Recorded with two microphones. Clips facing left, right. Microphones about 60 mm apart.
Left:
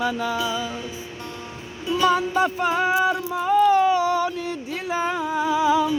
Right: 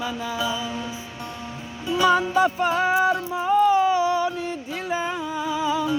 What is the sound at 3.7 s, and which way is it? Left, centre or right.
Music, left.